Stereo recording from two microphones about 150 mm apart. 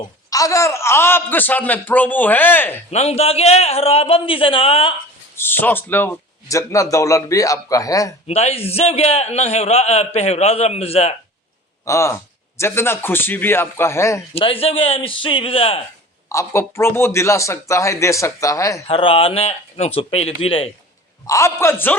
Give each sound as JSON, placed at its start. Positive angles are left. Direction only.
{"t": 0.3, "sound": "a man's voice", "side_deg": 20}
{"t": 2.9, "sound": "a man's voice", "side_deg": 45}
{"t": 5.4, "sound": "speech", "side_deg": 15}
{"t": 8.3, "sound": "a man's voice", "side_deg": 45}
{"t": 11.9, "sound": "a man's voice", "side_deg": 20}
{"t": 14.3, "sound": "a man's voice", "side_deg": 40}
{"t": 16.3, "sound": "speech", "side_deg": 20}
{"t": 18.9, "sound": "a man's voice", "side_deg": 35}
{"t": 21.2, "sound": "a man's voice", "side_deg": 20}